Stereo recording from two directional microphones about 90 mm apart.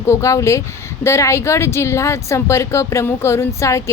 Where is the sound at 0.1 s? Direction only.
35° left (ahead or behind).